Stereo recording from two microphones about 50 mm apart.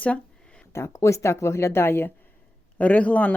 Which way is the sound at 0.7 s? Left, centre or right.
Left.